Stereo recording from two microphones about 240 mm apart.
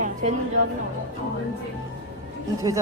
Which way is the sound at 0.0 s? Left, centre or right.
Right.